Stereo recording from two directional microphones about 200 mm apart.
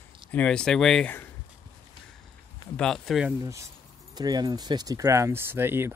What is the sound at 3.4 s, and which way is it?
Speech, 15° right (ahead or behind).